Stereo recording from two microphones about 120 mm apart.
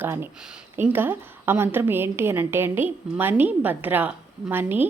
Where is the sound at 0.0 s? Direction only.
20° right (ahead or behind).